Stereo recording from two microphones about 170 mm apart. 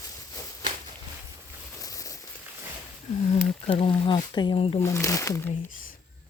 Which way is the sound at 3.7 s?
35° left (ahead or behind).